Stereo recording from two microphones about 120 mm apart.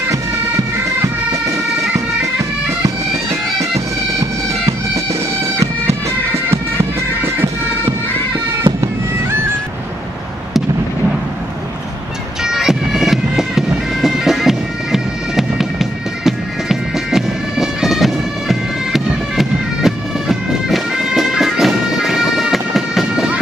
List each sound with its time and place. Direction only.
4.2 s bagpipes: 25° right (ahead or behind)
8.6 s music: 25° right (ahead or behind)
12.4 s bagpipes: 5° right (ahead or behind)